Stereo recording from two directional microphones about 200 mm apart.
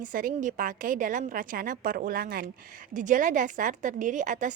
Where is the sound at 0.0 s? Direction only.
45° right (ahead or behind).